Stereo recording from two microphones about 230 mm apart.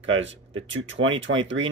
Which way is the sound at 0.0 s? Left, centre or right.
Right.